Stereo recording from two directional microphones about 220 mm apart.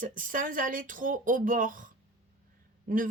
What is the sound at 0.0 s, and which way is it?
Speech, 35° right (ahead or behind).